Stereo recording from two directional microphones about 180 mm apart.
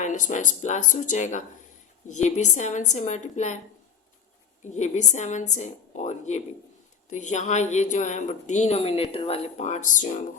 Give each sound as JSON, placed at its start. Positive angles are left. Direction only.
{"t": 0.0, "sound": "a woman's voice", "side_deg": 45}
{"t": 4.6, "sound": "a woman's voice", "side_deg": 40}